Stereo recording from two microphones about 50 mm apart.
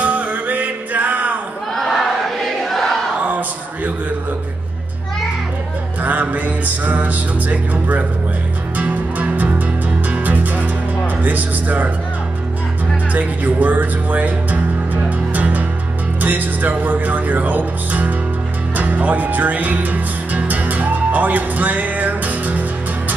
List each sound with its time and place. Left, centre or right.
0.0 s music: right
1.8 s a sound: centre
2.7 s crowd: centre
3.3 s a sound: right
6.0 s music: right
13.1 s music: right